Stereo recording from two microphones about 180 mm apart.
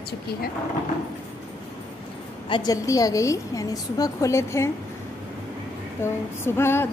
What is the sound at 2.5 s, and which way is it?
A woman's voice, 20° left (ahead or behind).